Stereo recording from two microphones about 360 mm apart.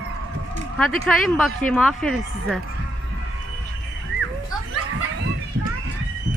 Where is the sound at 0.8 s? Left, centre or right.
Centre.